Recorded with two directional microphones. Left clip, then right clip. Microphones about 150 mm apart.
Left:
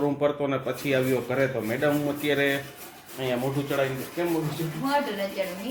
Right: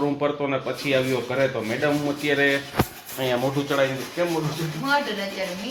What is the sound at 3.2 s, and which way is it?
Rub, 20° right (ahead or behind).